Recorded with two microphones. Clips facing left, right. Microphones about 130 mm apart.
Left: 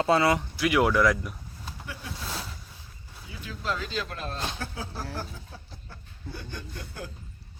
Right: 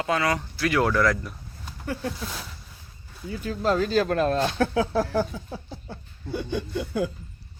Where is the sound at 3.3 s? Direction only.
45° right (ahead or behind); by 7.1 s 90° right.